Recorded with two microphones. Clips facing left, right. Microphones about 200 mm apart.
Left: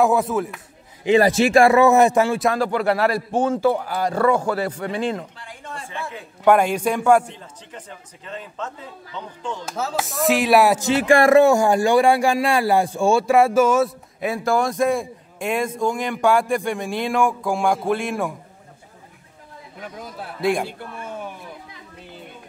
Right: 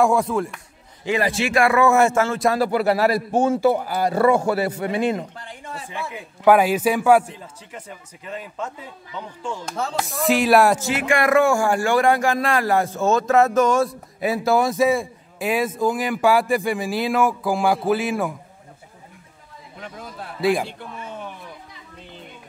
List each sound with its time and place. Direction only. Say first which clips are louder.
0.0 s speech: even; centre (ahead or behind)
1.2 s speech: left 3 dB; 40° left (ahead or behind); by 2.3 s 15° left (ahead or behind)
2.3 s a man's voice: right 1 dB; centre (ahead or behind)
9.7 s speech: left 1 dB; 5° left (ahead or behind)
10.8 s speech: left 5 dB; 30° left (ahead or behind); by 18.3 s centre (ahead or behind)
19.8 s speech: left 1 dB; 5° left (ahead or behind)